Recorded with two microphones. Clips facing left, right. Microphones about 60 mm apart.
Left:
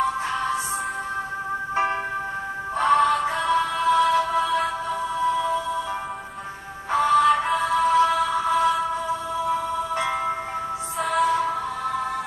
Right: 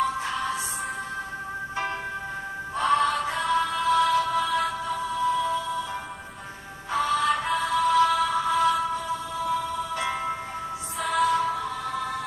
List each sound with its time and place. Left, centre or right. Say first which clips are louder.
1.7 s music: left 7 dB; left
6.9 s music: left 6 dB; left
11.0 s music: left 2 dB; centre